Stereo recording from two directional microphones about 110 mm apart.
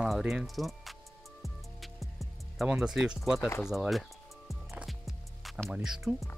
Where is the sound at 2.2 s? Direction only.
Centre (ahead or behind).